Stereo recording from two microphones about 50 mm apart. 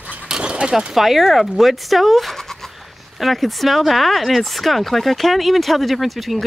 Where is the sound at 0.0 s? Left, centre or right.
Right.